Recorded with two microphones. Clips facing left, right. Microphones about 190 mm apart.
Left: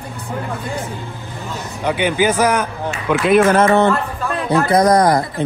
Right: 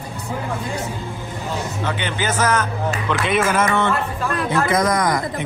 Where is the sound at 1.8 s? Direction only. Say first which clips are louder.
Left 10 dB; 10° left (ahead or behind).